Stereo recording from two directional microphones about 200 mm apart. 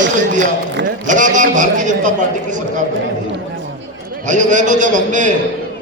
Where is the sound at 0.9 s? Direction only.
40° right (ahead or behind).